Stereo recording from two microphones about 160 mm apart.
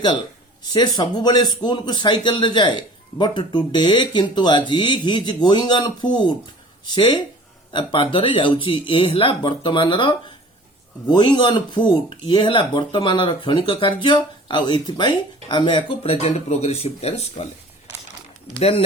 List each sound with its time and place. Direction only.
0.7 s speech: 25° left (ahead or behind)